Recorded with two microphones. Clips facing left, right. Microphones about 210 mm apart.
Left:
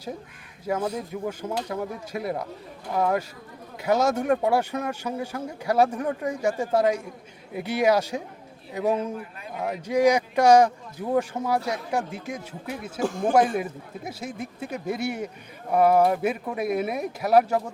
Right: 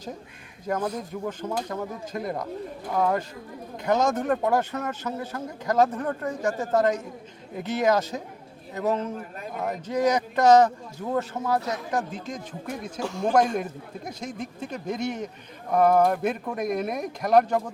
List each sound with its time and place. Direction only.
0.6 s speech: 10° left (ahead or behind)
13.1 s a man's voice: 50° left (ahead or behind)
13.3 s speech: 5° left (ahead or behind)